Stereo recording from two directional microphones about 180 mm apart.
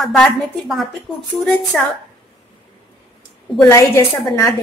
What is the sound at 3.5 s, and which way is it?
Speech, 15° left (ahead or behind).